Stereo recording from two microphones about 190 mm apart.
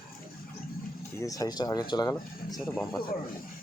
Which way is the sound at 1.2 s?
20° left (ahead or behind).